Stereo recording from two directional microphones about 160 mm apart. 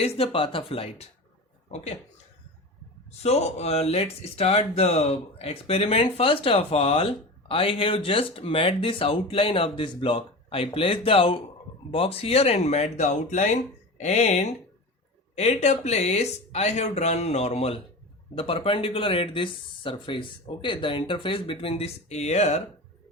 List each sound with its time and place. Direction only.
0.2 s speech: 35° left (ahead or behind)
3.1 s speech: 40° left (ahead or behind)